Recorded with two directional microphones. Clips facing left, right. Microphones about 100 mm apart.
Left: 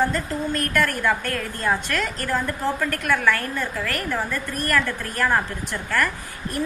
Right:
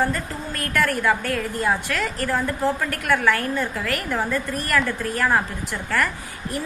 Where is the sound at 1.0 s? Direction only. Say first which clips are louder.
Right 2 dB; 10° right (ahead or behind).